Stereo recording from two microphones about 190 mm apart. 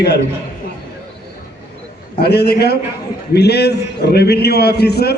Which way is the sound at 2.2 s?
60° left (ahead or behind).